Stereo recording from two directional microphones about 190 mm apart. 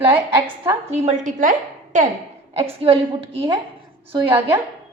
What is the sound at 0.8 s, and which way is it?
A woman's voice, 35° right (ahead or behind).